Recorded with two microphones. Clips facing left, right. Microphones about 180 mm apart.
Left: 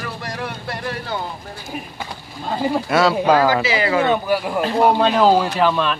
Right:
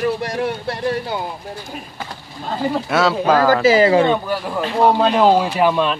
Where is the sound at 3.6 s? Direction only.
40° right (ahead or behind).